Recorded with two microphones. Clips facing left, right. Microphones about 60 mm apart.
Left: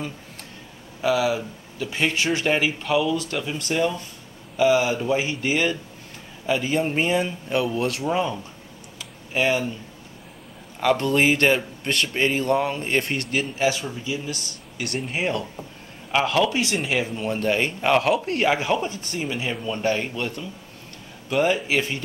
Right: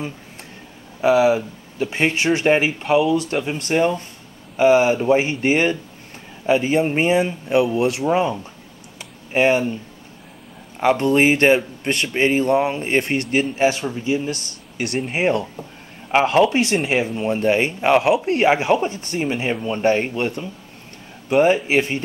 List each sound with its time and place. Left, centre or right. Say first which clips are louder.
1.0 s speech: right 6 dB; right
10.8 s speech: right 4 dB; right
17.0 s speech: right 5 dB; right